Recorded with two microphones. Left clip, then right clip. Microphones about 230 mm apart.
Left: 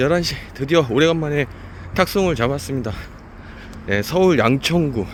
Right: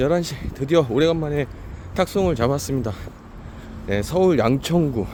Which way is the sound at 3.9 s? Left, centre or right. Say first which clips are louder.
Left 2 dB; centre.